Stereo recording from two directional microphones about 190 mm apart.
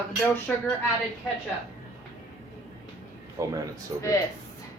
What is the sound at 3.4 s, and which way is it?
Speech, 15° right (ahead or behind).